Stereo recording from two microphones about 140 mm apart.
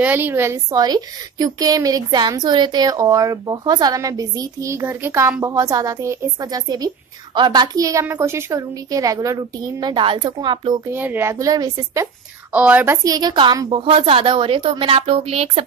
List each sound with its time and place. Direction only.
0.0 s a woman's voice: 15° right (ahead or behind); by 10.8 s 35° right (ahead or behind)
10.9 s a woman's voice: 15° right (ahead or behind)
12.5 s a woman's voice: 10° right (ahead or behind); by 15.6 s 45° right (ahead or behind)